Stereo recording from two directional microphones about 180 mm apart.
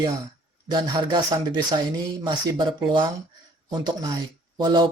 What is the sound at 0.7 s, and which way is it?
Speech, 25° right (ahead or behind).